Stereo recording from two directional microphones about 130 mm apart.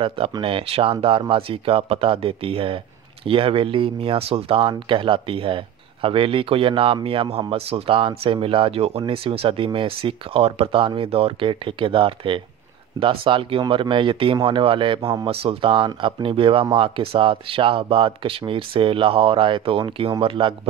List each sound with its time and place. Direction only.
0.3 s speech: 45° right (ahead or behind)